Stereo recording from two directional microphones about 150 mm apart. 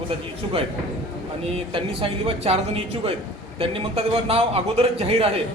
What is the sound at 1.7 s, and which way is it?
A man's voice, 40° right (ahead or behind).